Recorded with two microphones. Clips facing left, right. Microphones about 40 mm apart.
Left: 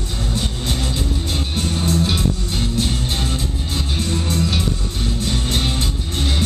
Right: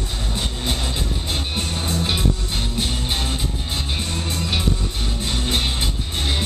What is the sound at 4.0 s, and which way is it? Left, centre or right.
Music, centre.